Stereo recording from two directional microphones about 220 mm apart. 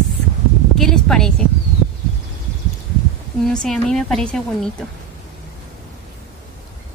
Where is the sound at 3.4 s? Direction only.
5° left (ahead or behind).